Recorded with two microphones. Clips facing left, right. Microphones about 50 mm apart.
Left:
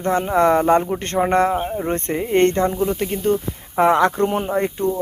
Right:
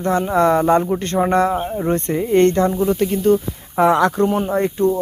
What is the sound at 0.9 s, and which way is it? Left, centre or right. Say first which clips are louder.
Speech: right 1 dB; left.